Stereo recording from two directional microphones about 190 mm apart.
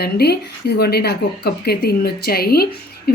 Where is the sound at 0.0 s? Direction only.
55° left (ahead or behind).